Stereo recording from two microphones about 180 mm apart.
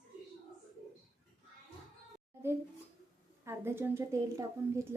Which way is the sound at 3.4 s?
15° right (ahead or behind).